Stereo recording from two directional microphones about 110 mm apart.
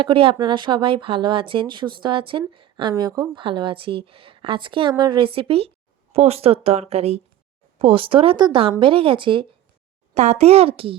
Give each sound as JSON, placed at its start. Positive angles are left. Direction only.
{"t": 0.0, "sound": "a woman's voice", "side_deg": -55}
{"t": 7.8, "sound": "a woman's voice", "side_deg": -55}
{"t": 10.2, "sound": "speech", "side_deg": -80}